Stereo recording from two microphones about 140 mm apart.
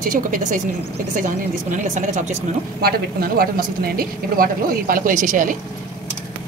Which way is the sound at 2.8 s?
90° right.